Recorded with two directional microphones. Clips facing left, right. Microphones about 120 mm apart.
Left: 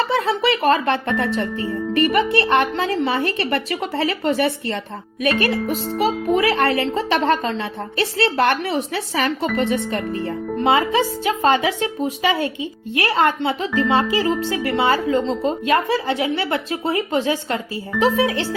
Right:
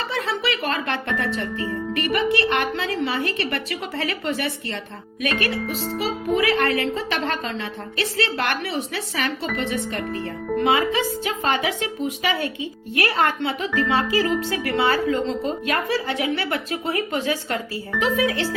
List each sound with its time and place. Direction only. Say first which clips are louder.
0.1 s speech: left 6 dB; 35° left (ahead or behind)
4.2 s speech: left 6 dB; 40° left (ahead or behind)